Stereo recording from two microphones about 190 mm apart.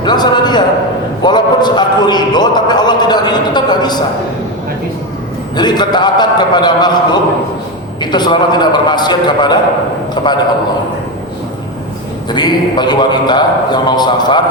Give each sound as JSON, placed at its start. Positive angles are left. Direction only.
{"t": 0.0, "sound": "a sound", "side_deg": 20}
{"t": 1.2, "sound": "a man's voice", "side_deg": 25}
{"t": 5.5, "sound": "a man's voice", "side_deg": 20}
{"t": 12.3, "sound": "a man's voice", "side_deg": 20}